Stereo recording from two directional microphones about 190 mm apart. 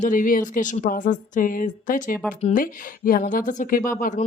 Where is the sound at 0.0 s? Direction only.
45° left (ahead or behind).